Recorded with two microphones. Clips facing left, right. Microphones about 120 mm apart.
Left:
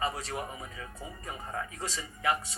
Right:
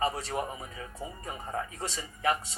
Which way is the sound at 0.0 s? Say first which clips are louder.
Right 3 dB; 30° right (ahead or behind).